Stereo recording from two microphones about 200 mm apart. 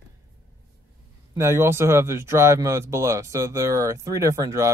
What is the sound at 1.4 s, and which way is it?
Speech, 10° right (ahead or behind).